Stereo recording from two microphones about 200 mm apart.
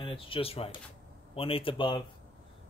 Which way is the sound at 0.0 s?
25° left (ahead or behind).